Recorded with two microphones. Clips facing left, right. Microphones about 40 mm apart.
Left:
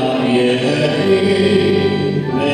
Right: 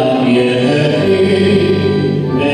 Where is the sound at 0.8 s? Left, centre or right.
Centre.